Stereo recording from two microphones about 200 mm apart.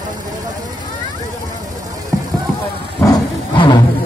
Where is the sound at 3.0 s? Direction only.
20° left (ahead or behind).